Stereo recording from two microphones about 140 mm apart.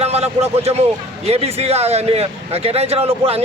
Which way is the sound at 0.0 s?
50° right (ahead or behind).